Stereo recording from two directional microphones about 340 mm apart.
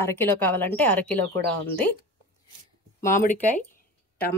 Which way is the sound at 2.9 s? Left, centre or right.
Left.